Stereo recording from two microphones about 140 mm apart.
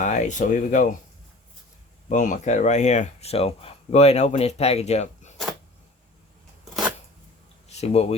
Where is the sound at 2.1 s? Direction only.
60° left (ahead or behind).